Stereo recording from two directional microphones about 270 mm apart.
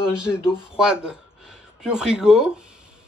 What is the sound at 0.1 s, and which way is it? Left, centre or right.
Speech, centre.